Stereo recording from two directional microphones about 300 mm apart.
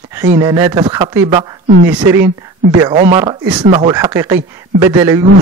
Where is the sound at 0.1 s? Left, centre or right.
Centre.